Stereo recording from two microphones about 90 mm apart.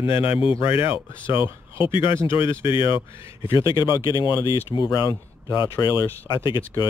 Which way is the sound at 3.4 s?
60° left (ahead or behind).